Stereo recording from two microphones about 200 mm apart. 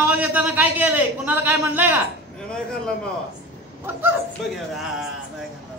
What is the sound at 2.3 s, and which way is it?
Speech, 5° left (ahead or behind).